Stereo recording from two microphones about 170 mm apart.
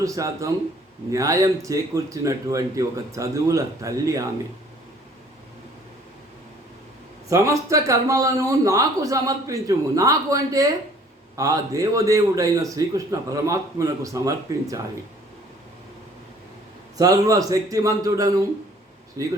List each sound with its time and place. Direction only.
0.0 s a man's voice: 20° right (ahead or behind)
7.3 s a man's voice: 20° right (ahead or behind)
17.0 s a man's voice: 20° right (ahead or behind)